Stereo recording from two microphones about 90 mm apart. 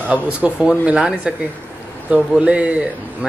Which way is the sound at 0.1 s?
15° right (ahead or behind).